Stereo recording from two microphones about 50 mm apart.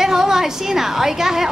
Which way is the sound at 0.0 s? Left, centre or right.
Centre.